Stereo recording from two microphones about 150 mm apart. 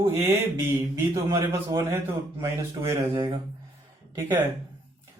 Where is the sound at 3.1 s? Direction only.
35° right (ahead or behind).